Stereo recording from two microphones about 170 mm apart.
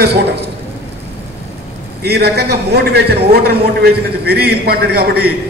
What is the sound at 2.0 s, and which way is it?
A man's voice, 70° right (ahead or behind).